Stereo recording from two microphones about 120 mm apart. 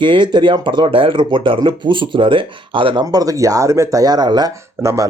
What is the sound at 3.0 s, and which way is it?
Speech, 30° right (ahead or behind).